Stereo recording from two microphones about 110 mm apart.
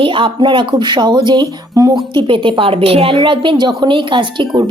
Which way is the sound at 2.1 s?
50° right (ahead or behind).